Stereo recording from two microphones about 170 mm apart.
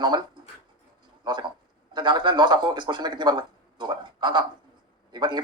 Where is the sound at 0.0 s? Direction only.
25° right (ahead or behind).